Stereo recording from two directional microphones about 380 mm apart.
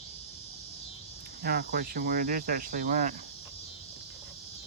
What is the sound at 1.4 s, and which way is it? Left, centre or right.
Speech, right.